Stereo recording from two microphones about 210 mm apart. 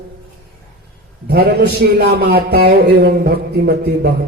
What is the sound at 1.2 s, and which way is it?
A man's voice, 50° right (ahead or behind).